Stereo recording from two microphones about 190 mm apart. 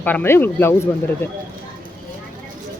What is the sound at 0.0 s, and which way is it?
Speech, 10° left (ahead or behind).